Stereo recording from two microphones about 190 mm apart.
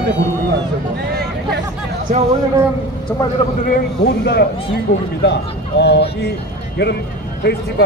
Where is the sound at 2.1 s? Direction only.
45° right (ahead or behind).